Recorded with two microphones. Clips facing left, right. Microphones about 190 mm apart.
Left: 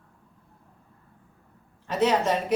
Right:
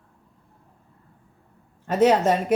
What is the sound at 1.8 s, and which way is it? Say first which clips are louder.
Speech: right 5 dB; 50° right (ahead or behind).